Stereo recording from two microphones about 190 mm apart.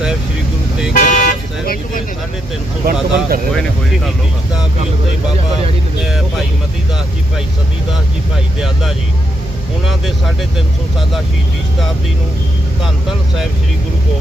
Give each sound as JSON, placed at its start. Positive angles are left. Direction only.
{"t": 0.9, "sound": "car", "side_deg": 40}
{"t": 2.8, "sound": "speech", "side_deg": -50}
{"t": 3.5, "sound": "speech", "side_deg": 5}
{"t": 8.5, "sound": "speech", "side_deg": 0}